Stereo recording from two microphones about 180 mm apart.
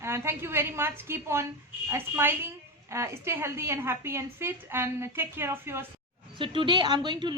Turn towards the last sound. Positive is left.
turn(degrees=-25)  # may be behind; listen again after turning